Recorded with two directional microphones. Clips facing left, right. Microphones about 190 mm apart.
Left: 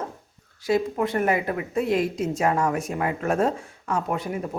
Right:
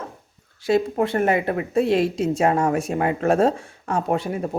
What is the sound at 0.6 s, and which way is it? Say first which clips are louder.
Speech: right 3 dB; 30° right (ahead or behind).